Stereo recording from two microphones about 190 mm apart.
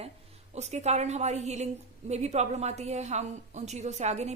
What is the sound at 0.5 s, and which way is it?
A woman's voice, 35° right (ahead or behind).